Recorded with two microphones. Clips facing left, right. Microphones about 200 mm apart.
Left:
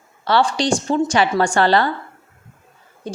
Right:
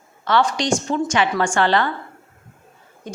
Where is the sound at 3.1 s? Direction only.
30° left (ahead or behind).